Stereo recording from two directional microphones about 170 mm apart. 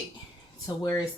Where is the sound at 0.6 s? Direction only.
20° left (ahead or behind).